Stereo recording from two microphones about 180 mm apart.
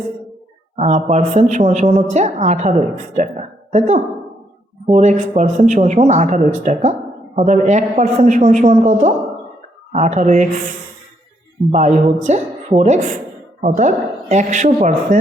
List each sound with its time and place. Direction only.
0.8 s speech: 40° right (ahead or behind)
11.7 s speech: 40° right (ahead or behind)